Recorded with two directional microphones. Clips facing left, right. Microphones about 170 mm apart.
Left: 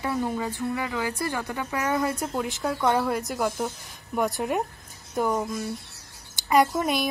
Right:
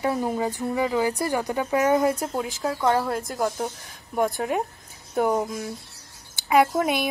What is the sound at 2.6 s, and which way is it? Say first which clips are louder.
Speech: right 1 dB; centre (ahead or behind).